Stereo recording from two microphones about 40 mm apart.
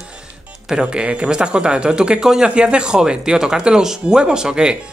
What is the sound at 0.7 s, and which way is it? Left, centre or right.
Speech, right.